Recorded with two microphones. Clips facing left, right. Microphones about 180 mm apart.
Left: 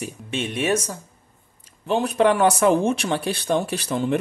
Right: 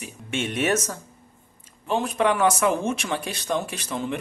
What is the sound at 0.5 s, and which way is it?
Speech, 15° left (ahead or behind).